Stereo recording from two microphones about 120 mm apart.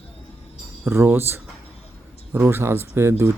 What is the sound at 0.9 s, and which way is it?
A man's voice, 20° right (ahead or behind).